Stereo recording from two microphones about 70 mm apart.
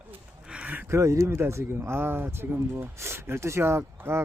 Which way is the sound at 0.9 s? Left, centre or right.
Right.